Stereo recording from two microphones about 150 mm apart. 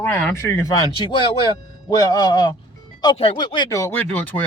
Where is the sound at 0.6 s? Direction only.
30° left (ahead or behind); by 4.4 s 10° left (ahead or behind).